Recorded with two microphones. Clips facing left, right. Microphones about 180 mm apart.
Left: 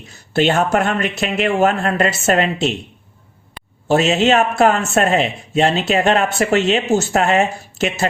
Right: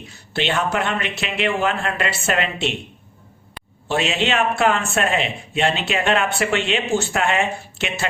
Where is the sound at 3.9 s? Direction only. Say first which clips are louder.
Left 7 dB; 40° left (ahead or behind).